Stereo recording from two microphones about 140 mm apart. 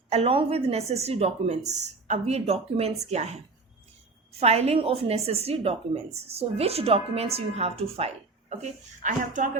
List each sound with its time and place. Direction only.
0.1 s a woman's voice: 45° right (ahead or behind)
4.4 s a woman's voice: 45° right (ahead or behind); by 9.5 s 65° right (ahead or behind)